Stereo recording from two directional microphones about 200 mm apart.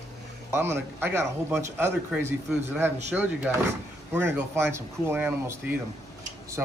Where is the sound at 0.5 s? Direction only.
10° right (ahead or behind).